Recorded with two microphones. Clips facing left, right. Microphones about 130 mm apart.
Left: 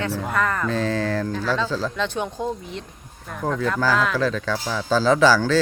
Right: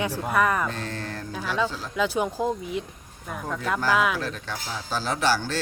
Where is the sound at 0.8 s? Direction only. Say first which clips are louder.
Left 11 dB; 90° left.